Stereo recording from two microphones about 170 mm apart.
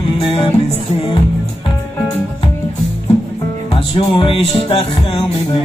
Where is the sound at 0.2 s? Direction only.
35° left (ahead or behind).